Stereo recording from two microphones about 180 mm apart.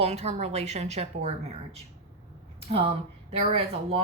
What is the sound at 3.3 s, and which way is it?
Speech, 35° right (ahead or behind).